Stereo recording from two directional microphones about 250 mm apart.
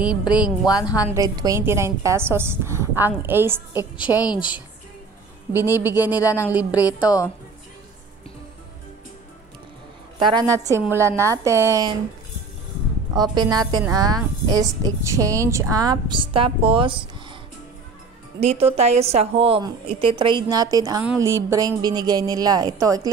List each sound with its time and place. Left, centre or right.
0.0 s speech: centre
0.7 s a woman's voice: centre
1.0 s a woman's voice: centre
4.1 s a woman's voice: centre
6.5 s speech: centre
6.8 s a woman's voice: centre
10.1 s a woman's voice: centre
13.1 s a woman's voice: centre
18.4 s a woman's voice: right